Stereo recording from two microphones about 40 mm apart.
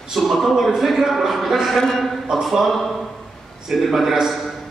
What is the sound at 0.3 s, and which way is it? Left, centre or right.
A man's voice, centre.